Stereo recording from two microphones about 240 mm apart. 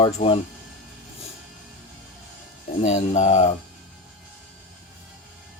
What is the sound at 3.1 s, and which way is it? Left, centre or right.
Speech, left.